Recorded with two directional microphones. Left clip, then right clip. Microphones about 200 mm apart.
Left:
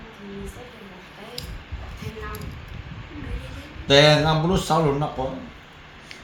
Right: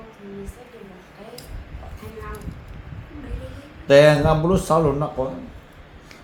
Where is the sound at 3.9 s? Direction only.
15° left (ahead or behind).